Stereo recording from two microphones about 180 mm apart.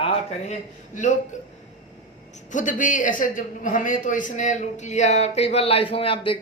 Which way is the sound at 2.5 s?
45° left (ahead or behind).